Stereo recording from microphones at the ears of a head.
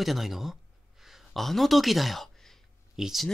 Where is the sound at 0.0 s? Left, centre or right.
Centre.